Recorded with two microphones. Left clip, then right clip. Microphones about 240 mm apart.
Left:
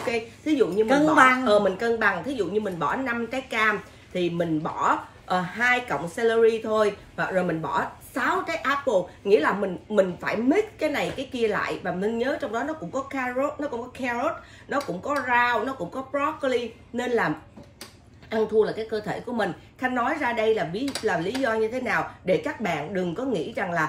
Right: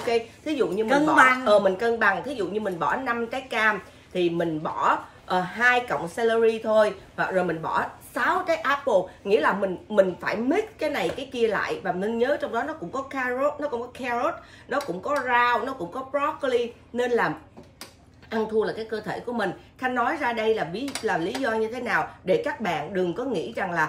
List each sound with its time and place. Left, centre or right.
0.1 s a woman's voice: centre
18.3 s a woman's voice: centre